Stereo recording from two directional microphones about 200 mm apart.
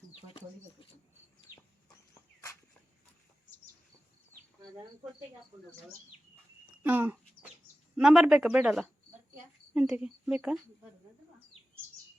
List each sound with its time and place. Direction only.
0.3 s speech: 25° left (ahead or behind)
6.8 s speech: 10° right (ahead or behind)